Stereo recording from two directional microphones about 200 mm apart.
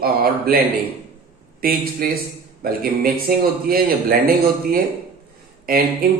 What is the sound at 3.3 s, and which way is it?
A man's voice, 50° right (ahead or behind).